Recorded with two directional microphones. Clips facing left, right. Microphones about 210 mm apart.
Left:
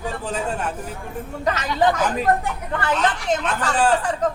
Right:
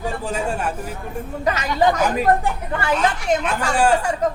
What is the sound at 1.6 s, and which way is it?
Speech, 45° right (ahead or behind).